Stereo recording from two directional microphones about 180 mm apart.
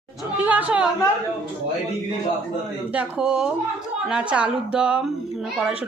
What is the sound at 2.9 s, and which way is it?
A woman's voice, 5° right (ahead or behind).